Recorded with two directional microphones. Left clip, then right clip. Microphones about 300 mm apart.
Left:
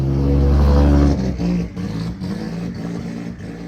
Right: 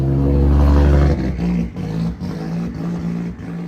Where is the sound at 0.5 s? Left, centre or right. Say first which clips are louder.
Left 1 dB; right.